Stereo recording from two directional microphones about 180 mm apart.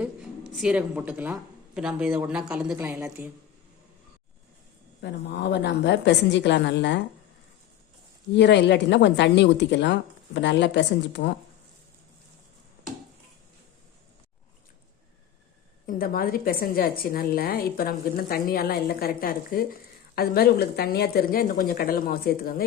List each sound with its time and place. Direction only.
0.5 s speech: 5° right (ahead or behind)
2.7 s a woman's voice: 15° right (ahead or behind)
4.9 s a woman's voice: 70° left (ahead or behind)
8.4 s a woman's voice: 75° left (ahead or behind)
15.9 s a woman's voice: 55° left (ahead or behind)